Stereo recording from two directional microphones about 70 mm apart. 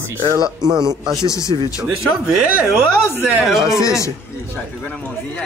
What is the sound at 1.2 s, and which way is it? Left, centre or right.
Speech, left.